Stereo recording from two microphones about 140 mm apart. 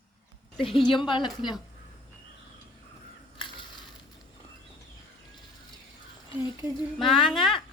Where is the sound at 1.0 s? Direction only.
35° left (ahead or behind).